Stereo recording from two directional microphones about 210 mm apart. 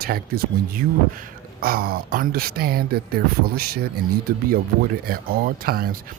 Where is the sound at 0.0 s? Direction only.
45° right (ahead or behind).